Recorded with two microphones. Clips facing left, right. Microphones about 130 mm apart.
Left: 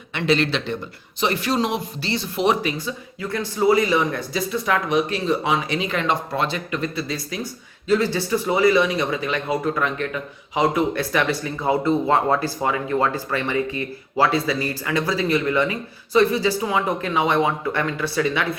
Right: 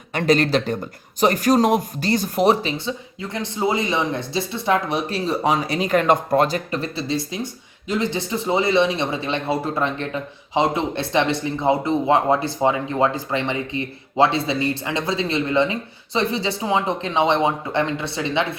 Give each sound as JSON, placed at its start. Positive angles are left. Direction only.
{"t": 0.1, "sound": "speech", "side_deg": -45}